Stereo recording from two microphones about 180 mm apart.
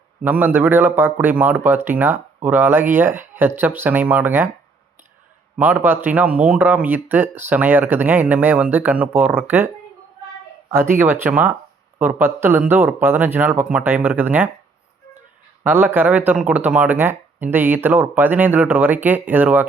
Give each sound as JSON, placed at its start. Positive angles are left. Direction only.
{"t": 0.2, "sound": "a man's voice", "side_deg": -10}
{"t": 5.5, "sound": "a man's voice", "side_deg": -10}
{"t": 10.7, "sound": "a man's voice", "side_deg": -15}
{"t": 15.6, "sound": "a man's voice", "side_deg": -10}